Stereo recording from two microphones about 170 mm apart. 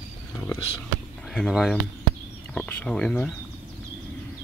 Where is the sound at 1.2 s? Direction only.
Centre (ahead or behind).